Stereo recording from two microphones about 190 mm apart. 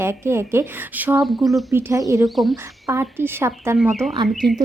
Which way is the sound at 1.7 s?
15° right (ahead or behind).